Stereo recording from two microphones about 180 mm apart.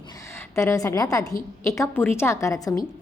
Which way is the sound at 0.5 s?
15° left (ahead or behind).